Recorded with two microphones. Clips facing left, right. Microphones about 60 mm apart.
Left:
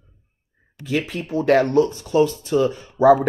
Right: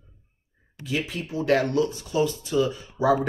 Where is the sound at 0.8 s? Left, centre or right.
Left.